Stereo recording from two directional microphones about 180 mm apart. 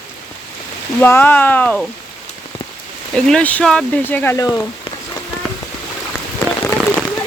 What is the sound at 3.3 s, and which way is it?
Speech, 5° left (ahead or behind).